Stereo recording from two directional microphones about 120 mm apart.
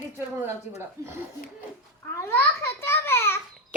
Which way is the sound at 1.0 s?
30° right (ahead or behind).